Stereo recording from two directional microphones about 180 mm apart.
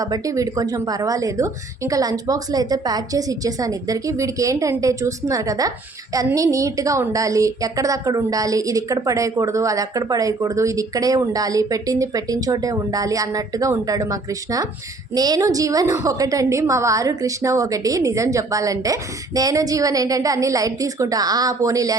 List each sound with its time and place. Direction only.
0.0 s a woman's voice: 20° right (ahead or behind)